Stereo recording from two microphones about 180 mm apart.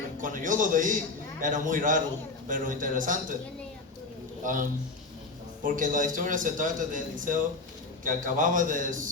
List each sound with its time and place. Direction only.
0.2 s a man's voice: 50° right (ahead or behind)
4.4 s a man's voice: 45° right (ahead or behind)
5.6 s a man's voice: 45° right (ahead or behind)